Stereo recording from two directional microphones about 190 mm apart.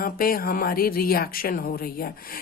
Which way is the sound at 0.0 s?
50° left (ahead or behind).